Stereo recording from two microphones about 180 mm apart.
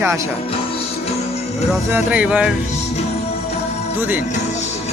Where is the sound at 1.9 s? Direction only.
10° right (ahead or behind).